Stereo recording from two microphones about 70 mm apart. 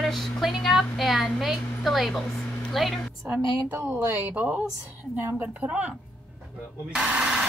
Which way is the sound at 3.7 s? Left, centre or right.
Right.